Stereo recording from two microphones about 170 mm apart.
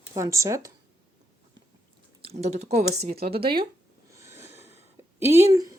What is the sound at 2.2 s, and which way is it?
Speech, 40° right (ahead or behind).